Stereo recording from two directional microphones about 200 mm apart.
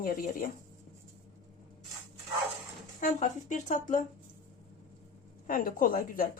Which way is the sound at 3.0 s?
40° left (ahead or behind).